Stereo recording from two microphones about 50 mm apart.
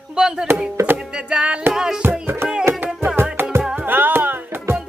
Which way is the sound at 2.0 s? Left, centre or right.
Right.